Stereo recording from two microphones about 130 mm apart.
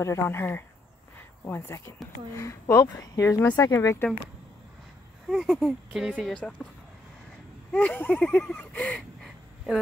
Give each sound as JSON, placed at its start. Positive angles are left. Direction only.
{"t": 0.0, "sound": "speech", "side_deg": 20}
{"t": 5.3, "sound": "speech", "side_deg": 0}
{"t": 6.3, "sound": "speech", "side_deg": 5}
{"t": 7.7, "sound": "speech", "side_deg": 10}